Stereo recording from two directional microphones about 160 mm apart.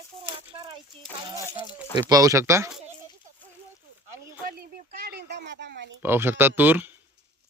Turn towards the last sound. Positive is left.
turn(degrees=-10)  # may be behind; listen again after turning